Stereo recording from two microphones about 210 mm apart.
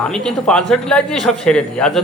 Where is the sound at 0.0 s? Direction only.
5° left (ahead or behind).